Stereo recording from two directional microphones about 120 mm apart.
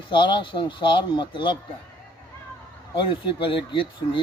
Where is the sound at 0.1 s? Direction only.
40° left (ahead or behind).